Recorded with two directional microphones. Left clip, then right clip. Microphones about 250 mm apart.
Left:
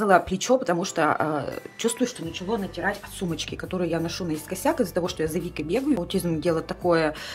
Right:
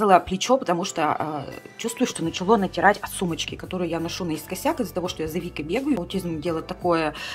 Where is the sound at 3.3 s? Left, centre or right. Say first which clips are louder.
Right 1 dB; centre.